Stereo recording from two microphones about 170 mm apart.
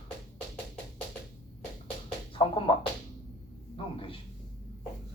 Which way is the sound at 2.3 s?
30° left (ahead or behind).